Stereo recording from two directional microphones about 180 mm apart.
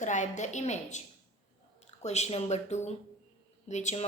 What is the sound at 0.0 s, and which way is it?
A woman's voice, 45° left (ahead or behind).